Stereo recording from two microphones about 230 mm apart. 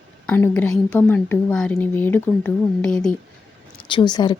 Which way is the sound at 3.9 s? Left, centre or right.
Centre.